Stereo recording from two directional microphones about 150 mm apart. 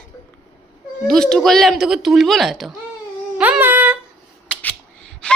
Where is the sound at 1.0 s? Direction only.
5° left (ahead or behind).